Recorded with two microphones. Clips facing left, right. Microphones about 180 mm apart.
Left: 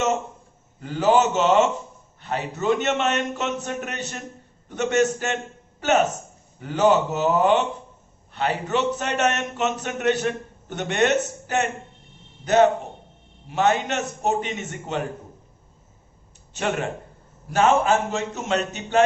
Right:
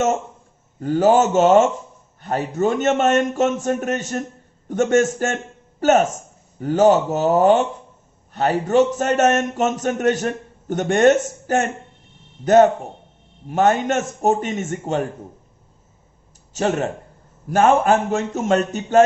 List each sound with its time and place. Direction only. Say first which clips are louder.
0.8 s a man's voice: right 4 dB; 45° right (ahead or behind)
16.6 s speech: right 5 dB; 40° right (ahead or behind)
17.5 s a man's voice: right 4 dB; 50° right (ahead or behind)